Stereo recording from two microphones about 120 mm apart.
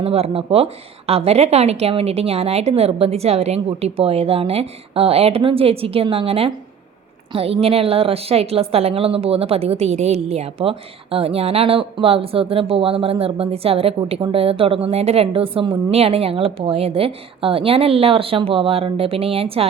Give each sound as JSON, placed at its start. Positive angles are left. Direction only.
{"t": 0.0, "sound": "a woman's voice", "side_deg": -55}